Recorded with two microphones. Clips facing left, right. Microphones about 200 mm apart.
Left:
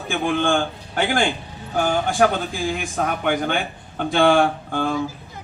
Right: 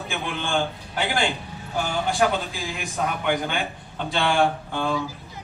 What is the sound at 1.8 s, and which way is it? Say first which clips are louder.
A man's voice: left 4 dB; 50° left (ahead or behind).